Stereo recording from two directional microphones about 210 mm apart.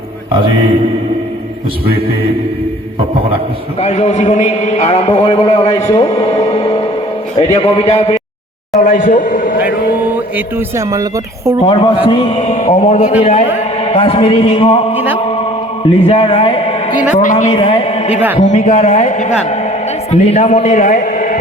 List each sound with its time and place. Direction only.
3.8 s a man's voice: 30° left (ahead or behind)
7.5 s a man's voice: 30° left (ahead or behind)
10.3 s speech: 15° right (ahead or behind)
11.6 s a man's voice: 25° left (ahead or behind)
14.9 s speech: 10° right (ahead or behind)
15.9 s a man's voice: 25° left (ahead or behind)